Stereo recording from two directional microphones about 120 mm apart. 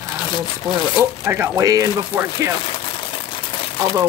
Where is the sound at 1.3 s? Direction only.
25° right (ahead or behind).